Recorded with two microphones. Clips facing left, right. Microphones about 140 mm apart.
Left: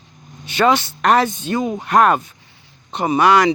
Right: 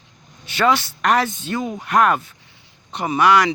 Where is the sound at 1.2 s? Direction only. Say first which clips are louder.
Left 4 dB; 20° left (ahead or behind).